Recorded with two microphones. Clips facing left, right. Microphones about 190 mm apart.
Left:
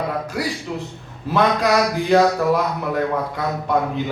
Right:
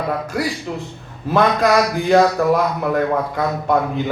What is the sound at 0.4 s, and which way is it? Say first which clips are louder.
Speech: right 2 dB; 50° right (ahead or behind).